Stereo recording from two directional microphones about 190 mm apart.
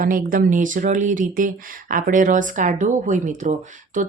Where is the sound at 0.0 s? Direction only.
45° right (ahead or behind).